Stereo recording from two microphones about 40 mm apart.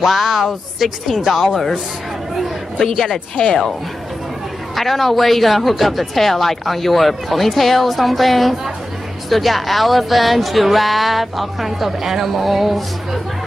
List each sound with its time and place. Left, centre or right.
0.0 s a woman's voice: centre
4.7 s a woman's voice: centre